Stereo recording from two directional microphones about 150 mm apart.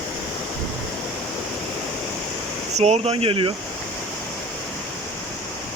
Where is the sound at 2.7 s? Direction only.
45° right (ahead or behind).